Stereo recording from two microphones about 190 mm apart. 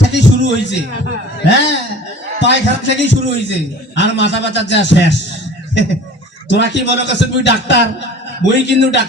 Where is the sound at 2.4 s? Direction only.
70° left (ahead or behind).